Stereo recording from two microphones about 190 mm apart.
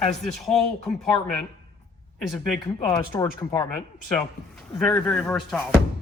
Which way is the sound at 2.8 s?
20° left (ahead or behind).